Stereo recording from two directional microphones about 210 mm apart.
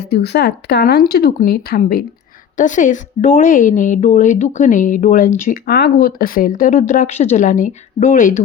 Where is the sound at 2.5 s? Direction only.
35° left (ahead or behind).